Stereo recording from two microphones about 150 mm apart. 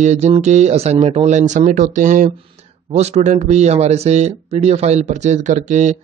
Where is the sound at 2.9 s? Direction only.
45° right (ahead or behind).